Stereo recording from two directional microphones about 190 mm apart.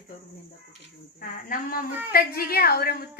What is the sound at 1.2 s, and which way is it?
A woman's voice, 50° left (ahead or behind).